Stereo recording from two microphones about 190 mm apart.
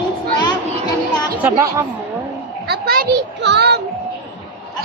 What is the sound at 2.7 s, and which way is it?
Speech, 50° right (ahead or behind).